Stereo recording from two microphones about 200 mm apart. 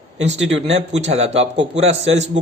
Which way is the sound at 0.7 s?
30° right (ahead or behind).